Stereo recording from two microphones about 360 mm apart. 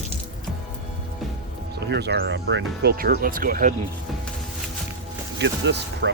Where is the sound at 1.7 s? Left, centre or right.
Right.